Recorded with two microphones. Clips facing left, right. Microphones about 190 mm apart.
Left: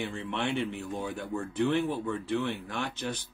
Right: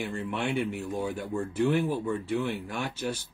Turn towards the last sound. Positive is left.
turn(degrees=-10)  # may be behind; listen again after turning